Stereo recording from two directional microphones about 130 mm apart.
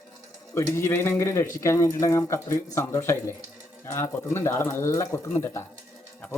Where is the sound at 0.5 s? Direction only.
20° left (ahead or behind).